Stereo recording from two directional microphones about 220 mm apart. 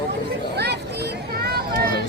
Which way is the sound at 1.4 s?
45° right (ahead or behind).